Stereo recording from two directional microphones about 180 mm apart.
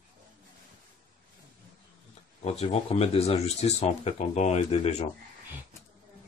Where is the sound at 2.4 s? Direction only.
35° left (ahead or behind).